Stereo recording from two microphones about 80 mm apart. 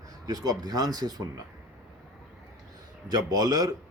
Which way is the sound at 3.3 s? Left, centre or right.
Right.